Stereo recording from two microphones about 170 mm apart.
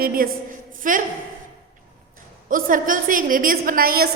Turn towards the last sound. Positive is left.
turn(degrees=-60)  # may be behind; listen again after turning